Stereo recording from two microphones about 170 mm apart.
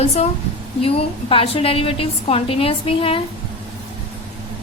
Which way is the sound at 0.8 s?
35° left (ahead or behind).